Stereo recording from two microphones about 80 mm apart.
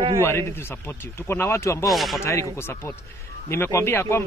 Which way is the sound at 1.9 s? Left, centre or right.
Centre.